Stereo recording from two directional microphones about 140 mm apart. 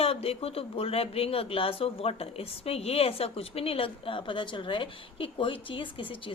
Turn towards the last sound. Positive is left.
turn(degrees=40)  # may be behind; listen again after turning